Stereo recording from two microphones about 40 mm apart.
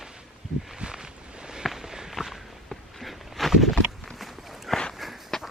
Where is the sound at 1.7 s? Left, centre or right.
Centre.